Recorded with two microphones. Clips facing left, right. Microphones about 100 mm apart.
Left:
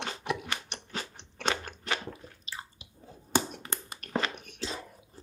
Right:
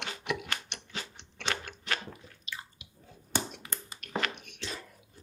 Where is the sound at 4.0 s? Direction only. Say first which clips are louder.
Left 2 dB; 40° left (ahead or behind).